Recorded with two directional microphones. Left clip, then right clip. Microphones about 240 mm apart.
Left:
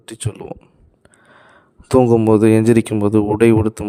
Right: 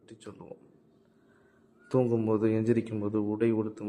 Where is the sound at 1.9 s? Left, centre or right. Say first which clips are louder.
Left 15 dB; left.